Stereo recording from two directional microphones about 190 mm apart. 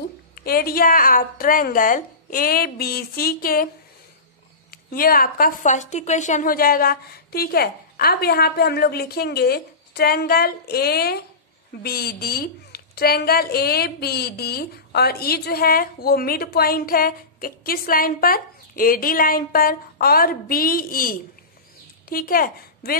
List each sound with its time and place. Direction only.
0.4 s a woman's voice: 50° left (ahead or behind)
4.6 s a woman's voice: 50° left (ahead or behind)